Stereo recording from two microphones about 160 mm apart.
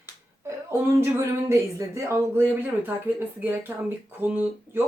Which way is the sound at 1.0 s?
15° right (ahead or behind).